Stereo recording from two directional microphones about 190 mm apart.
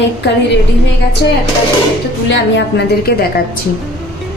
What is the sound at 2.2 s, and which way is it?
A woman's voice, 70° left (ahead or behind).